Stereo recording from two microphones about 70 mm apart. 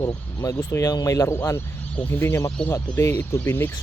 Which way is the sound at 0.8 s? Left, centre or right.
Left.